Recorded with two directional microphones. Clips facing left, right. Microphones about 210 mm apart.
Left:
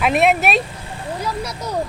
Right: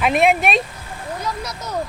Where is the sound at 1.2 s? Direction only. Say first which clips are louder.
Left 3 dB; 10° left (ahead or behind).